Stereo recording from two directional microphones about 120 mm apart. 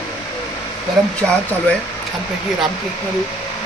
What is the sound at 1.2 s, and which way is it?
Speech, 5° left (ahead or behind).